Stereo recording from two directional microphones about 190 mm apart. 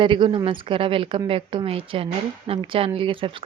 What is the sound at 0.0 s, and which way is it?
Speech, 25° right (ahead or behind).